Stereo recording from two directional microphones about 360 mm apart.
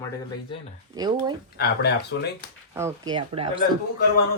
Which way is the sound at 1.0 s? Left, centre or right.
Centre.